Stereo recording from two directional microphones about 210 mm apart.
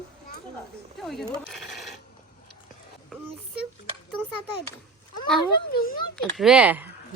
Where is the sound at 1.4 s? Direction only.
Centre (ahead or behind).